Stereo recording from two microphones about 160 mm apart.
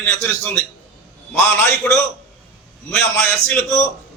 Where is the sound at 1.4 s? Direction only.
15° left (ahead or behind).